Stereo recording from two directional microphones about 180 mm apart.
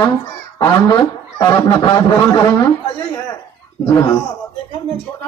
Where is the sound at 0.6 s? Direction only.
20° left (ahead or behind).